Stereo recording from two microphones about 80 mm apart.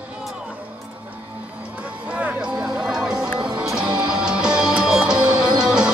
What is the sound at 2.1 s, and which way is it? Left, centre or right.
Music, centre.